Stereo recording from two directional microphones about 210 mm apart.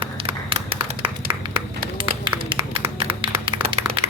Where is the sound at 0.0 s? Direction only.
25° right (ahead or behind).